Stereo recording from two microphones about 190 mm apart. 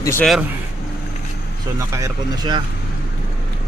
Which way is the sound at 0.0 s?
15° left (ahead or behind).